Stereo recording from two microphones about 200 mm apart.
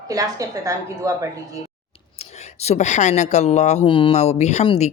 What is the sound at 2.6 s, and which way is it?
Speech, 35° left (ahead or behind).